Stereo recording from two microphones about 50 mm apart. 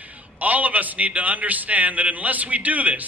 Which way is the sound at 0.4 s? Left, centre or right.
Right.